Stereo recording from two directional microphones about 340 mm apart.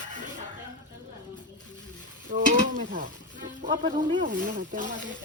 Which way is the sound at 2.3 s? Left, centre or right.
Right.